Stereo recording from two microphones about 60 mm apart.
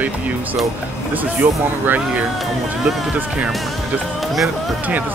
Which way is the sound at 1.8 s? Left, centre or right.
Right.